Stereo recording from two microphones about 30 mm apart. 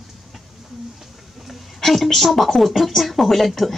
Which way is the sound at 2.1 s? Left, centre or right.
Centre.